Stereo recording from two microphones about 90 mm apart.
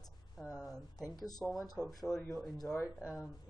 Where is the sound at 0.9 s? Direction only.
45° left (ahead or behind).